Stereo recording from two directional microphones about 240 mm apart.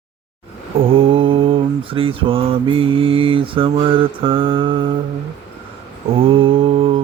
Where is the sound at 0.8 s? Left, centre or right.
Right.